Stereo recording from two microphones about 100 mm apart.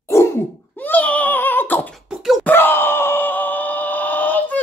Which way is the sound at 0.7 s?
15° left (ahead or behind).